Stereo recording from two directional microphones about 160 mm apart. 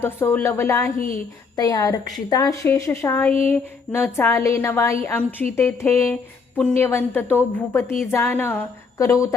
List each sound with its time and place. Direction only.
0.0 s a woman's voice: 15° left (ahead or behind)